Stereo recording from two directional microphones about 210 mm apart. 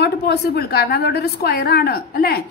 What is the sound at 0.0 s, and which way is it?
A woman's voice, 50° left (ahead or behind).